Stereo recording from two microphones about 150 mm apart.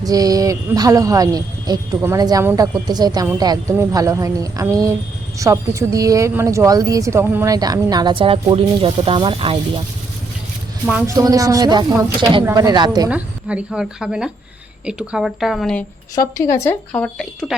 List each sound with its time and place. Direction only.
0.0 s a woman's voice: 25° right (ahead or behind)
11.0 s a woman's voice: 20° right (ahead or behind)
13.1 s speech: 10° right (ahead or behind)